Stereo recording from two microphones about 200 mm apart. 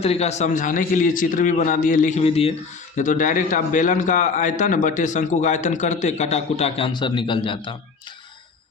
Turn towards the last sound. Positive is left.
turn(degrees=25)  # may be behind; listen again after turning